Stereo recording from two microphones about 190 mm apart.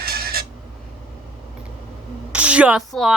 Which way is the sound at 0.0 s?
55° right (ahead or behind).